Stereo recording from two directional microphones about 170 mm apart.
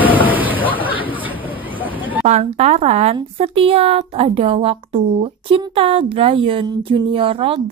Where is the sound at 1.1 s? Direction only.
10° right (ahead or behind).